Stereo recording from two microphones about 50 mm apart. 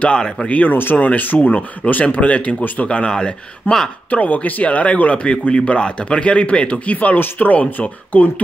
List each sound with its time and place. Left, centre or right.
0.0 s speech: centre
0.5 s speech: left
3.1 s speech: centre
4.1 s speech: left